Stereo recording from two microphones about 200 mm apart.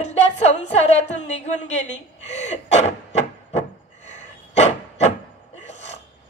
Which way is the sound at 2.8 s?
30° left (ahead or behind).